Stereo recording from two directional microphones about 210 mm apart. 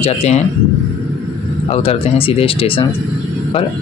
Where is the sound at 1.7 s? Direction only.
25° left (ahead or behind).